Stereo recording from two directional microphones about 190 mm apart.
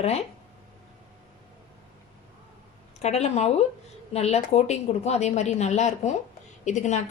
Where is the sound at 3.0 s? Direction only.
35° left (ahead or behind).